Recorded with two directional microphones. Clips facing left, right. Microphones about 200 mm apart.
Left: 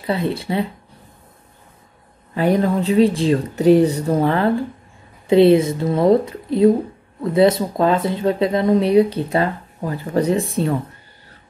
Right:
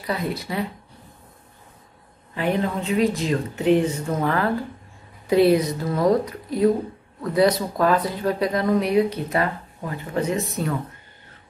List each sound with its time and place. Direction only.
0.0 s speech: 30° left (ahead or behind)
2.3 s speech: 40° left (ahead or behind)